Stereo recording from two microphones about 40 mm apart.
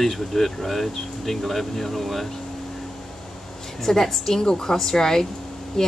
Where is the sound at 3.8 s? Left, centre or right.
Centre.